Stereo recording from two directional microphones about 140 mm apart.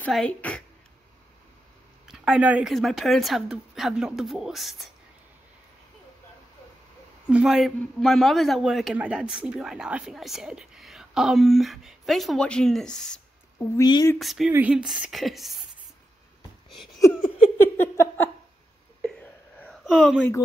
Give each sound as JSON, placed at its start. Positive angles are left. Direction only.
{"t": 0.1, "sound": "speech", "side_deg": 10}
{"t": 2.0, "sound": "a woman's voice", "side_deg": -5}
{"t": 7.2, "sound": "a woman's voice", "side_deg": -5}
{"t": 13.6, "sound": "speech", "side_deg": 25}
{"t": 14.1, "sound": "a woman's voice", "side_deg": 0}
{"t": 17.6, "sound": "a sound", "side_deg": 15}
{"t": 18.9, "sound": "whispering", "side_deg": 5}